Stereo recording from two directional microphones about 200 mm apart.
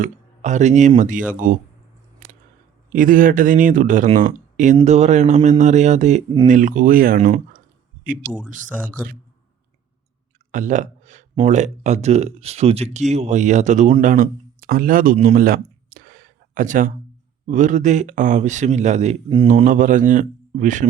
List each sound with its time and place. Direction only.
0.0 s speech: 35° right (ahead or behind)
2.9 s speech: 40° right (ahead or behind)
8.4 s speech: 40° right (ahead or behind)
9.0 s speech: 5° right (ahead or behind)
10.5 s a sound: 40° right (ahead or behind)
11.4 s speech: 35° right (ahead or behind)
19.5 s speech: 40° right (ahead or behind)